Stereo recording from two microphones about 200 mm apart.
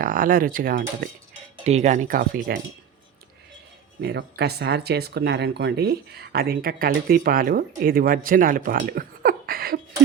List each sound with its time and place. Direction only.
0.0 s speech: 45° right (ahead or behind)
4.0 s speech: 55° right (ahead or behind)